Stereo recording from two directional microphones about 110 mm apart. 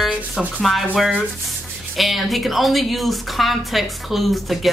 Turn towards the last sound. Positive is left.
turn(degrees=0)  # may be behind; listen again after turning